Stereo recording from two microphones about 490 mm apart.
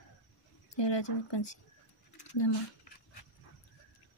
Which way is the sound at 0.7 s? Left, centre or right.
Left.